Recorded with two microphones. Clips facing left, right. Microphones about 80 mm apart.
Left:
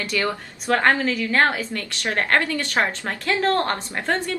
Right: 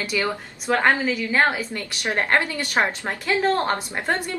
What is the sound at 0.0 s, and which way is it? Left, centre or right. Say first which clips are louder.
A woman's voice: even; centre.